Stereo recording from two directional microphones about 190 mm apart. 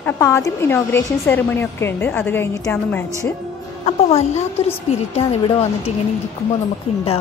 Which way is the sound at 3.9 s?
35° left (ahead or behind).